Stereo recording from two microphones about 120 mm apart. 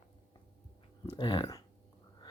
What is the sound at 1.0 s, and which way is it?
Speech, 40° left (ahead or behind).